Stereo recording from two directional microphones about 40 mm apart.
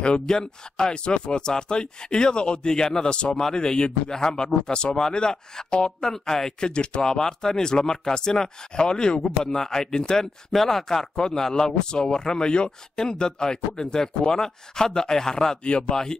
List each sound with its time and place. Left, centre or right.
0.0 s speech: left
6.7 s speech: left
10.5 s speech: centre